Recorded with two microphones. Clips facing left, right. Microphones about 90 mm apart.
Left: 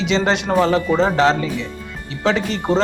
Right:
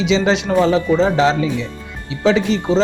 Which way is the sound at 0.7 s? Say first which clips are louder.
Right 2 dB; 10° right (ahead or behind).